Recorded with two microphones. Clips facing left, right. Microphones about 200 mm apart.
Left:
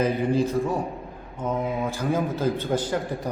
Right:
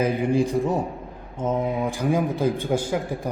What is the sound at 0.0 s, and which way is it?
A man's voice, 15° right (ahead or behind).